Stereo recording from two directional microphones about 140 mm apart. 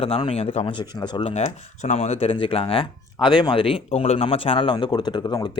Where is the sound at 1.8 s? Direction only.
55° left (ahead or behind).